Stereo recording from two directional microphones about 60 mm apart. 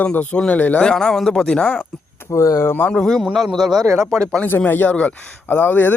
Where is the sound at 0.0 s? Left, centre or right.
Left.